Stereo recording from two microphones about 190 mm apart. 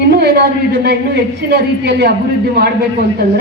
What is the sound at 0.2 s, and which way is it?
Speech, 60° right (ahead or behind).